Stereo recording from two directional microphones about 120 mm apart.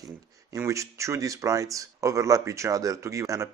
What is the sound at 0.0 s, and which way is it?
Speech, 30° right (ahead or behind).